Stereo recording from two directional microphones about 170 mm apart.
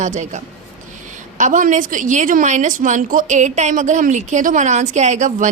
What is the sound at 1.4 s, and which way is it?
A woman's voice, 50° right (ahead or behind).